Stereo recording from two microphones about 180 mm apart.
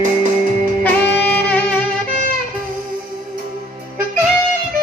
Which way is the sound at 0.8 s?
10° left (ahead or behind).